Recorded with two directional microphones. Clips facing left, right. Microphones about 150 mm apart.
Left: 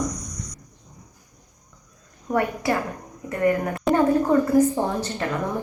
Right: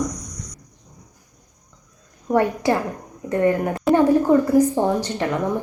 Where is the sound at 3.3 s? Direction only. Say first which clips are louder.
Right 3 dB; 25° right (ahead or behind).